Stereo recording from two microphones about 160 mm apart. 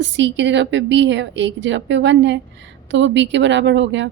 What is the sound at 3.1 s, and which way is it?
A woman's voice, 90° right.